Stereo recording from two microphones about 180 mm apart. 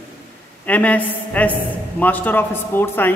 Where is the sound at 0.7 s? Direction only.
10° left (ahead or behind).